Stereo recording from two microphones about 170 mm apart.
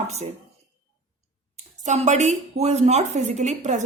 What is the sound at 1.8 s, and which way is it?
A woman's voice, 45° right (ahead or behind).